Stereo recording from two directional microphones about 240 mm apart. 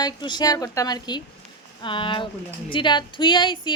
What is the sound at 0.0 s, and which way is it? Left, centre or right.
A woman's voice, centre.